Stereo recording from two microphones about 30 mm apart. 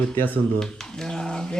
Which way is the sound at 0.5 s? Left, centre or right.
Centre.